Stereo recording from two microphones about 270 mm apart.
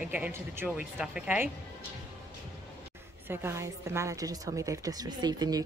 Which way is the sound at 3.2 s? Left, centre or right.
Centre.